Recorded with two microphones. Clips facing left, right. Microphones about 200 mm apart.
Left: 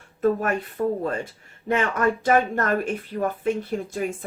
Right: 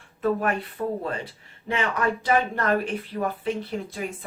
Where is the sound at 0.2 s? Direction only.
45° left (ahead or behind).